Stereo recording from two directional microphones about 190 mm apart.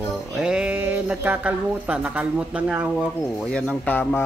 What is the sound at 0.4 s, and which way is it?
Speech, 5° right (ahead or behind).